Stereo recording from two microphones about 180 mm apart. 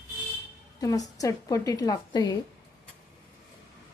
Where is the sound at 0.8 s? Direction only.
20° left (ahead or behind).